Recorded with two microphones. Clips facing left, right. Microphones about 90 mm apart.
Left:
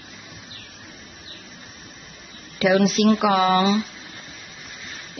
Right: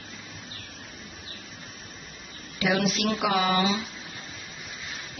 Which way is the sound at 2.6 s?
35° left (ahead or behind).